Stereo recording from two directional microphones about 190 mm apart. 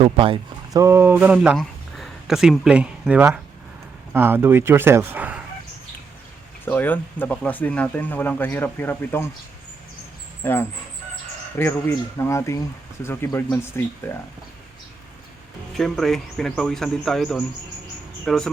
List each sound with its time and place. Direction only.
0.0 s speech: 30° right (ahead or behind)
0.8 s speech: 15° right (ahead or behind)
6.7 s speech: 10° left (ahead or behind)
10.4 s speech: 10° left (ahead or behind)
15.7 s speech: centre (ahead or behind)